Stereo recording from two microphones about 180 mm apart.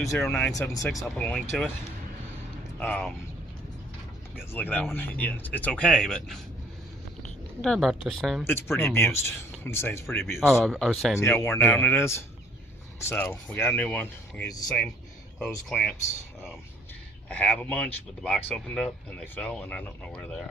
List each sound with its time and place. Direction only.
0.2 s speech: 5° left (ahead or behind)
0.6 s speech: 20° left (ahead or behind)
2.7 s speech: 5° left (ahead or behind)
4.4 s speech: 10° left (ahead or behind)
8.4 s speech: 15° left (ahead or behind)
10.4 s speech: centre (ahead or behind)
11.2 s speech: 15° left (ahead or behind)
15.7 s speech: 5° left (ahead or behind)
17.2 s speech: 5° left (ahead or behind)